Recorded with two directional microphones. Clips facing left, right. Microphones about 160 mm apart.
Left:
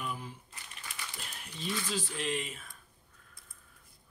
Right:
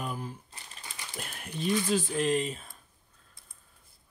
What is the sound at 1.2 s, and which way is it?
Speech, 55° right (ahead or behind).